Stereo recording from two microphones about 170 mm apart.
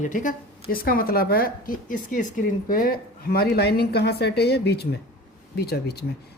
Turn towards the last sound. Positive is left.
turn(degrees=70)  # may be behind; listen again after turning